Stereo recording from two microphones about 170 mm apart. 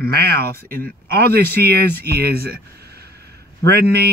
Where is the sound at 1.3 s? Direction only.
65° right (ahead or behind).